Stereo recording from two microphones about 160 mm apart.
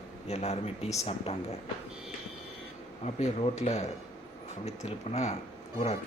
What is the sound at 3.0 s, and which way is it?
Speech, 45° left (ahead or behind).